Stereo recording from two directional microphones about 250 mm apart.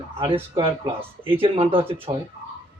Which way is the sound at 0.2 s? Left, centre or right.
Right.